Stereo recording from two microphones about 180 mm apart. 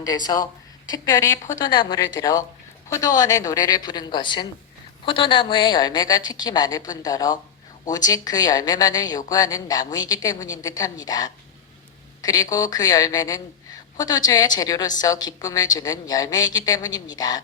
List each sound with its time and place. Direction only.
0.1 s a woman's voice: 20° left (ahead or behind)